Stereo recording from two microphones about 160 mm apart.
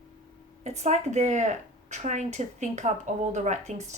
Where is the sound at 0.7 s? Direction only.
45° right (ahead or behind).